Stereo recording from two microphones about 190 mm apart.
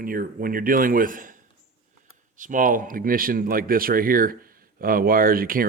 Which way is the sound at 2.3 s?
45° right (ahead or behind).